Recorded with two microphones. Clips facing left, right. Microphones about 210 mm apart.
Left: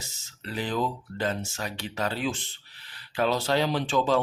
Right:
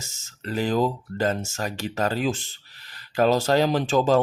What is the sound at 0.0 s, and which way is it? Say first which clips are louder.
Speech: right 5 dB; 45° right (ahead or behind).